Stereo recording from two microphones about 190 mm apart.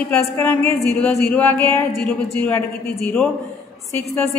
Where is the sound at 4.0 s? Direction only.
35° left (ahead or behind).